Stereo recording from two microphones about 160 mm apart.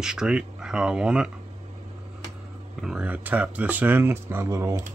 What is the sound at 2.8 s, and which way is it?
Speech, 5° right (ahead or behind).